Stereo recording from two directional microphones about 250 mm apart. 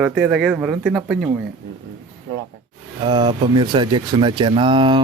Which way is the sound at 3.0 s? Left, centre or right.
Centre.